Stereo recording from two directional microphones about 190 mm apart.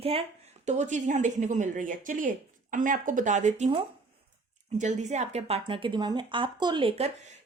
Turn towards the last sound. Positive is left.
turn(degrees=-35)  # may be behind; listen again after turning